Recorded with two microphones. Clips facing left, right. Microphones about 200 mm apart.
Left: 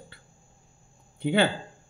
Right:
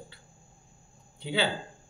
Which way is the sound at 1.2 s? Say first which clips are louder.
Left 7 dB; 50° left (ahead or behind).